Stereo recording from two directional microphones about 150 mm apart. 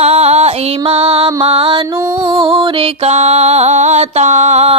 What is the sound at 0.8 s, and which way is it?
Female singing, 40° right (ahead or behind).